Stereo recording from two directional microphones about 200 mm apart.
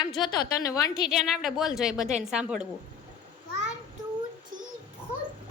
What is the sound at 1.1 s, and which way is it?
A woman's voice, centre (ahead or behind).